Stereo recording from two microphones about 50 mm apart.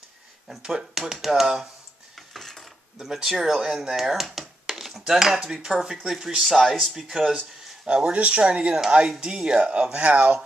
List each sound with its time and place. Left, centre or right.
0.7 s speech: centre
2.1 s mechanisms: centre
3.1 s speech: centre
7.2 s speech: centre